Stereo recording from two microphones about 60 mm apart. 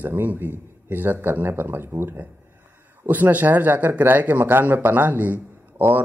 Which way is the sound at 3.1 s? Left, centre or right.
Right.